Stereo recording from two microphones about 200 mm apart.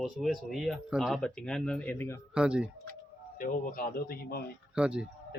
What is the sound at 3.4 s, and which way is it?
Speech, 45° left (ahead or behind).